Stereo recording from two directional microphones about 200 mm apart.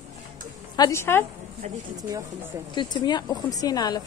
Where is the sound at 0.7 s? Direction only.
15° left (ahead or behind).